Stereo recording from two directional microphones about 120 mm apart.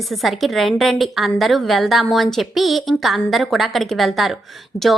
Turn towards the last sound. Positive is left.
turn(degrees=-20)  # may be behind; listen again after turning